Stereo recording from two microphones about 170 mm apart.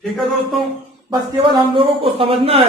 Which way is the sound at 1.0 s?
30° right (ahead or behind).